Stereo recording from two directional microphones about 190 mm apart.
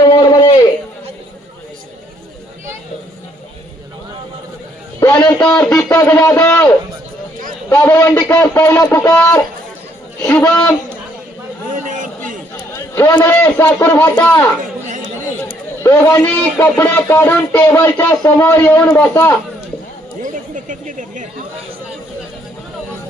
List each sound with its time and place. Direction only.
0.0 s a sound: 20° left (ahead or behind)
4.9 s a man's voice: 15° left (ahead or behind)
7.7 s a man's voice: 10° left (ahead or behind)
10.2 s a man's voice: 10° left (ahead or behind)
12.7 s a man's voice: 10° left (ahead or behind)
15.8 s a man's voice: 10° left (ahead or behind)
20.2 s a sound: 40° right (ahead or behind)